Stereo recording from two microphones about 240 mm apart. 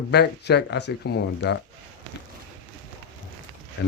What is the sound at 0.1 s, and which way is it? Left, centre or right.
Speech, left.